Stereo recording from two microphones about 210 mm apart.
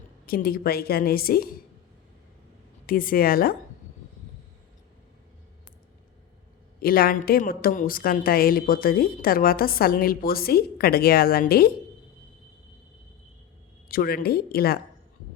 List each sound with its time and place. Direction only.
0.3 s a woman's voice: 45° left (ahead or behind)
2.8 s a woman's voice: 40° left (ahead or behind)
6.8 s a woman's voice: 45° left (ahead or behind)
13.8 s a woman's voice: 45° left (ahead or behind)